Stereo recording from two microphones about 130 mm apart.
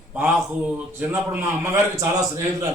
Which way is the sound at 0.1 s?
15° right (ahead or behind).